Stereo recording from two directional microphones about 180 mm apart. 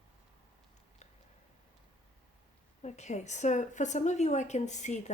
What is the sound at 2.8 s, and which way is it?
A woman's voice, 40° left (ahead or behind).